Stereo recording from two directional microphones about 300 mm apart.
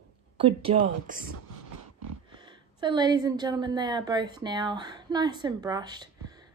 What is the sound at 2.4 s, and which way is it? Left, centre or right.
A woman's voice, centre.